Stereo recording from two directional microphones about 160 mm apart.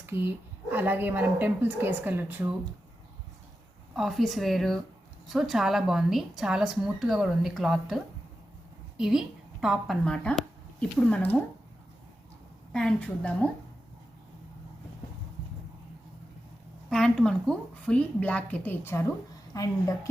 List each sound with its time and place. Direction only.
0.0 s a woman's voice: 15° right (ahead or behind)
3.9 s a woman's voice: centre (ahead or behind)
12.7 s a woman's voice: 5° left (ahead or behind)
16.9 s a woman's voice: 5° left (ahead or behind); by 20.0 s 20° left (ahead or behind)